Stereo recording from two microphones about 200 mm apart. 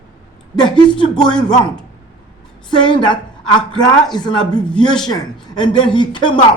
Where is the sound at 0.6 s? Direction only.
25° left (ahead or behind).